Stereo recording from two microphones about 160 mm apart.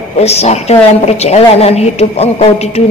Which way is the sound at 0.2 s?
40° left (ahead or behind).